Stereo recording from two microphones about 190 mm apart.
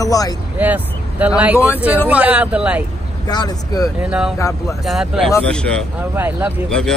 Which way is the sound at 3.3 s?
20° left (ahead or behind).